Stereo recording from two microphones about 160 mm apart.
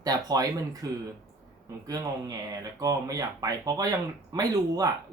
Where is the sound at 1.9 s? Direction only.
25° right (ahead or behind).